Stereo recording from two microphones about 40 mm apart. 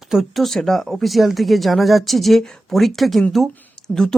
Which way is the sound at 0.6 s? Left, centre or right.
Centre.